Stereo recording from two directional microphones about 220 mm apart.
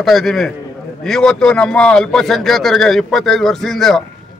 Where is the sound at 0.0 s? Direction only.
Centre (ahead or behind).